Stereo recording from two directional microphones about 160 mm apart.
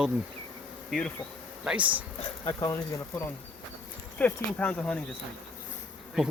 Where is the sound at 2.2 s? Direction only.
25° left (ahead or behind); by 5.0 s 10° left (ahead or behind).